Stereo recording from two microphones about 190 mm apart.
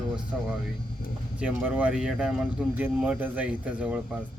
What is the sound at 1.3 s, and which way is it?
A man's voice, 5° right (ahead or behind).